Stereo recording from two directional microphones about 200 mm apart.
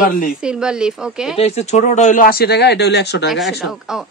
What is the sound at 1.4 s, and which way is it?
Speech, 35° left (ahead or behind).